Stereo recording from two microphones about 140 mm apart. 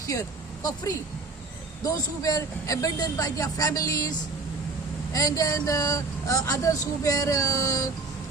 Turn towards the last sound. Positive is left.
turn(degrees=25)  # may be behind; listen again after turning